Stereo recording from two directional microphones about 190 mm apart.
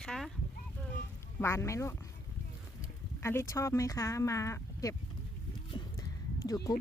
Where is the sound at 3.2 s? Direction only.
15° left (ahead or behind).